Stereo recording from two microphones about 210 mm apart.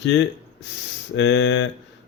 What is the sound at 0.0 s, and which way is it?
Speech, 55° left (ahead or behind).